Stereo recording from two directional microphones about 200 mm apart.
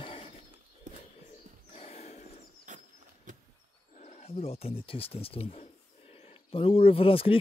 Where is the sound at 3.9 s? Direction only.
35° left (ahead or behind).